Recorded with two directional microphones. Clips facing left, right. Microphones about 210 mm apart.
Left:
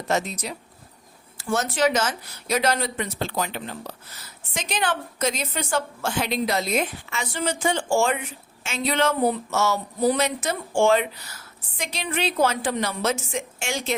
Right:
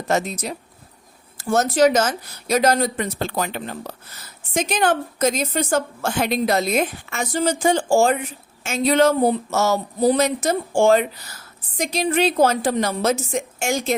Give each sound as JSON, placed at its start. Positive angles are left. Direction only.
{"t": 0.1, "sound": "a woman's voice", "side_deg": -45}